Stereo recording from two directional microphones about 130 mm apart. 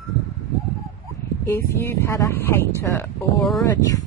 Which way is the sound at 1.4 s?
20° left (ahead or behind).